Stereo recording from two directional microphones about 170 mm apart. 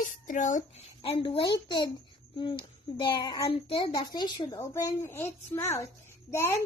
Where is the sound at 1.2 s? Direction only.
30° left (ahead or behind).